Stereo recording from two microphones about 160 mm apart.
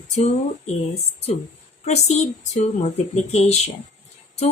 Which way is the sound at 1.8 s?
45° left (ahead or behind).